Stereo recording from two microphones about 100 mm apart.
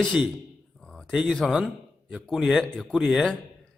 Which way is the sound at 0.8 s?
5° left (ahead or behind).